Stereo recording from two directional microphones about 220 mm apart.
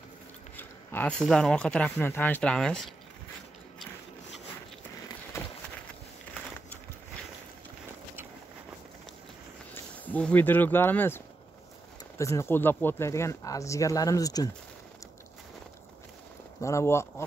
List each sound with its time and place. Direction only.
0.6 s speech: 5° left (ahead or behind)
5.3 s run: 10° left (ahead or behind)
10.0 s speech: 5° left (ahead or behind)
16.6 s speech: 10° left (ahead or behind)